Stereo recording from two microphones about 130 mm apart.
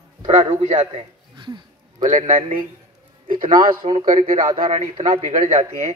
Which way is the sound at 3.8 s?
40° right (ahead or behind).